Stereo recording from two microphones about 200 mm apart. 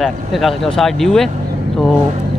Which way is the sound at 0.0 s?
Centre (ahead or behind).